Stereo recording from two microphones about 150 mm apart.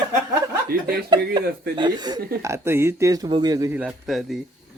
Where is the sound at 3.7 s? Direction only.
5° right (ahead or behind).